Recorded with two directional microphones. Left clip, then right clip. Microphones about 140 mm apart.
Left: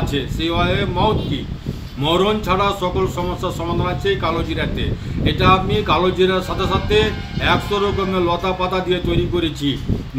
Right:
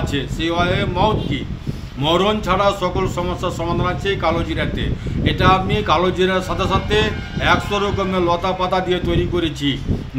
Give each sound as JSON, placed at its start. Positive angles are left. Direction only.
{"t": 0.0, "sound": "a man's voice", "side_deg": -30}